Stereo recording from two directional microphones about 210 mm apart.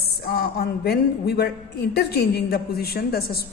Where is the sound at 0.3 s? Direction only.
50° left (ahead or behind).